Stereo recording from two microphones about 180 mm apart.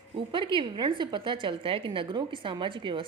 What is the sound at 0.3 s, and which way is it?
A woman's voice, 25° right (ahead or behind).